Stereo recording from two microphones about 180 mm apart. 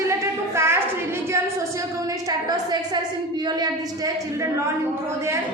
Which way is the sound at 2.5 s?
20° right (ahead or behind).